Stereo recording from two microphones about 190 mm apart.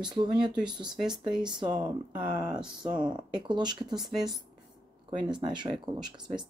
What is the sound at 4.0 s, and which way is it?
Speech, centre (ahead or behind).